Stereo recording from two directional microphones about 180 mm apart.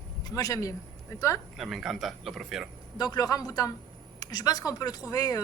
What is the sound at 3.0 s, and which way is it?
A woman's voice, 20° left (ahead or behind).